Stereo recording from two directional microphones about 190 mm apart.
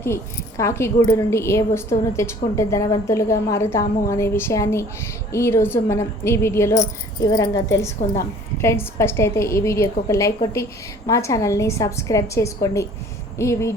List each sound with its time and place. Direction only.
0.0 s a woman's voice: 15° left (ahead or behind)